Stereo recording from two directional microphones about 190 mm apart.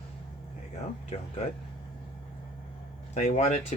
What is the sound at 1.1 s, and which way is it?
Speech, 30° left (ahead or behind).